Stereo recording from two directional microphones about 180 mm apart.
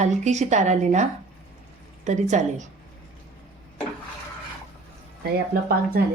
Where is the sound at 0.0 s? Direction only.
40° right (ahead or behind).